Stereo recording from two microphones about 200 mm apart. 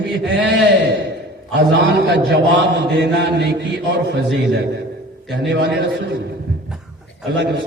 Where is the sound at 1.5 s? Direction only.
55° right (ahead or behind).